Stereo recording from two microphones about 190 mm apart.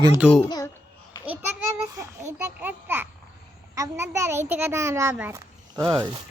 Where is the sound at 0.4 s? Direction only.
20° left (ahead or behind).